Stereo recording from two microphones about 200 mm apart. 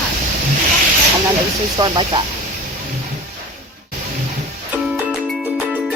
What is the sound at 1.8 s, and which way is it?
Speech, 20° right (ahead or behind).